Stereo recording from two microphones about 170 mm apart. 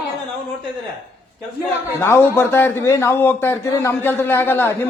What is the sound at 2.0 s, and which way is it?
A man's voice, 15° left (ahead or behind).